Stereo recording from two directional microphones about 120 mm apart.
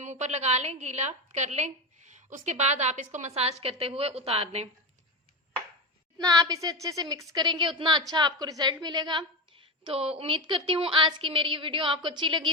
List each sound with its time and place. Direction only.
0.0 s a woman's voice: 75° right (ahead or behind)
6.1 s a woman's voice: 35° right (ahead or behind)